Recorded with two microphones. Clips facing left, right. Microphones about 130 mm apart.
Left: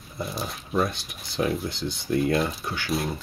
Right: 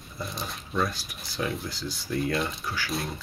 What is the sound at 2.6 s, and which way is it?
Speech, 25° left (ahead or behind).